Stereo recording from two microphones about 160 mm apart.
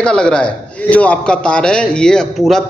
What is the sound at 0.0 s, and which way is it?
A man's voice, 5° left (ahead or behind).